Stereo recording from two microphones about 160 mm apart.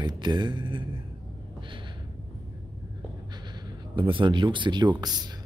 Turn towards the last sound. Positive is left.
turn(degrees=-25)  # may be behind; listen again after turning